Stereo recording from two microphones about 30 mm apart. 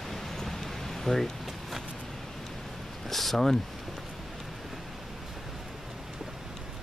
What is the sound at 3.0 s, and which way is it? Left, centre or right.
Speech, centre.